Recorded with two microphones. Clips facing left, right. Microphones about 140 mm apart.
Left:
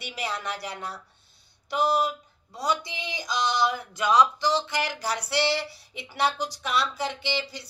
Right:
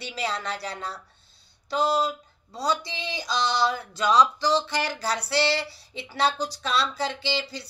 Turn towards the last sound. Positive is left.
turn(degrees=15)  # may be behind; listen again after turning